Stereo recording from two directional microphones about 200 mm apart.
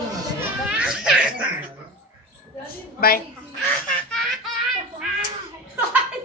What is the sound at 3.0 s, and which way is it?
Speech, 50° left (ahead or behind).